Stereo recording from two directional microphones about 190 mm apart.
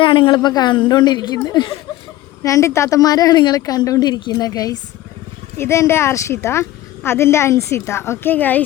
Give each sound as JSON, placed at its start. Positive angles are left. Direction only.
{"t": 0.0, "sound": "a woman's voice", "side_deg": 25}